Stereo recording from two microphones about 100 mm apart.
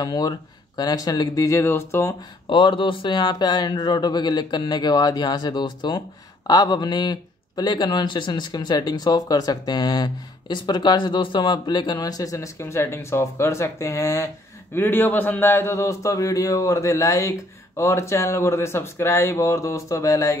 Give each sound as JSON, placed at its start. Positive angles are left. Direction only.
{"t": 0.0, "sound": "speech", "side_deg": 40}
{"t": 2.5, "sound": "speech", "side_deg": 55}
{"t": 14.8, "sound": "a man's voice", "side_deg": 20}